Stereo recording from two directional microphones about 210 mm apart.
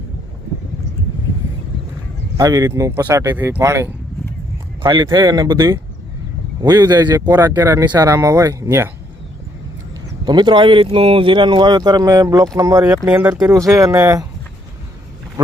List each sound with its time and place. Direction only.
2.4 s speech: 15° right (ahead or behind)
10.2 s speech: 20° right (ahead or behind)